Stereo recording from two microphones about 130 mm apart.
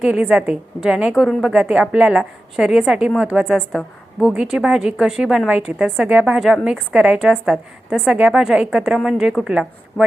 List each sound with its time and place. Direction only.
0.0 s a woman's voice: 10° right (ahead or behind)